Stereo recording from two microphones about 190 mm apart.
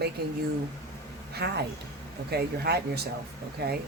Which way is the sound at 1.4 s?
60° right (ahead or behind).